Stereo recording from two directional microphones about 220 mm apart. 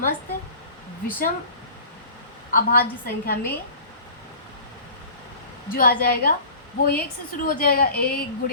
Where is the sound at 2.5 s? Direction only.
40° left (ahead or behind).